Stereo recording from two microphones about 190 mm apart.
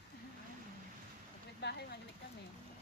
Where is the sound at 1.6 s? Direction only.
60° left (ahead or behind).